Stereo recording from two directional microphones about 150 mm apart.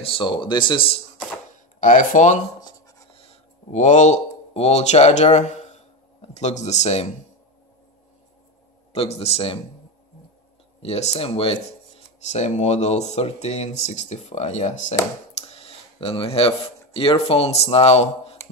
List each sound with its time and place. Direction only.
0.0 s speech: 35° left (ahead or behind)
1.8 s speech: 60° left (ahead or behind)
3.1 s a sound: 40° left (ahead or behind)
6.3 s speech: 50° left (ahead or behind)
8.9 s speech: 40° left (ahead or behind)
10.8 s speech: 45° left (ahead or behind)
15.5 s speech: 40° left (ahead or behind)